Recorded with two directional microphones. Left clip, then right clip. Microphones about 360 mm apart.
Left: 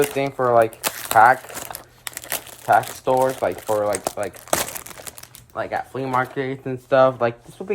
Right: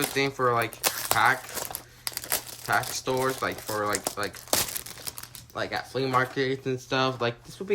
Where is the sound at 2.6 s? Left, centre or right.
Centre.